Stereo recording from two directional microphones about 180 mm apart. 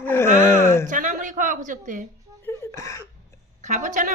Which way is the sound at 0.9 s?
45° right (ahead or behind).